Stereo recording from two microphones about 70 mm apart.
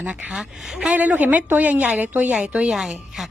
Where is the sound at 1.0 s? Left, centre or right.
Right.